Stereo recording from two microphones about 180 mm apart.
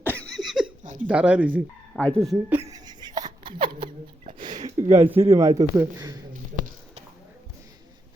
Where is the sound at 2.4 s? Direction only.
15° right (ahead or behind).